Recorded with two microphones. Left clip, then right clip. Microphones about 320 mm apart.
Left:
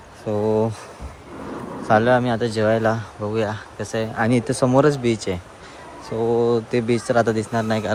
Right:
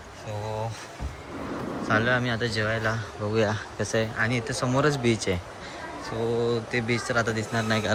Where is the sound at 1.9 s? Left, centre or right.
Centre.